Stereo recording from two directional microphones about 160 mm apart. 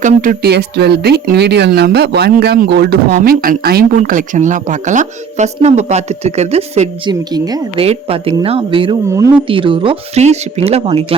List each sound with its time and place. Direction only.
0.0 s speech: 60° right (ahead or behind); by 3.0 s 80° right
3.2 s speech: 65° right (ahead or behind); by 7.1 s 40° right (ahead or behind)
7.1 s a woman's voice: 25° right (ahead or behind)
7.8 s speech: 35° right (ahead or behind)